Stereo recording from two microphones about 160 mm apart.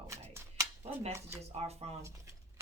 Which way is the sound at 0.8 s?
40° right (ahead or behind).